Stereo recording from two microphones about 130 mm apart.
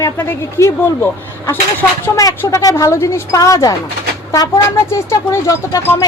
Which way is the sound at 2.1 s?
25° left (ahead or behind).